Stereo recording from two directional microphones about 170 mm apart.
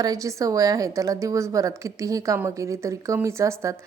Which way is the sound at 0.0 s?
20° right (ahead or behind).